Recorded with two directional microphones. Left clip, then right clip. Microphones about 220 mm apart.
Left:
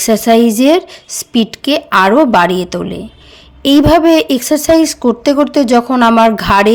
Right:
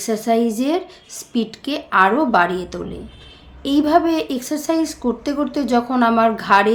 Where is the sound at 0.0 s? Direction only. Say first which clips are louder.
Left 9 dB; 45° left (ahead or behind).